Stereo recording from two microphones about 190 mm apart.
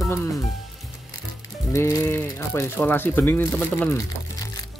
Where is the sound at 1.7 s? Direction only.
15° left (ahead or behind).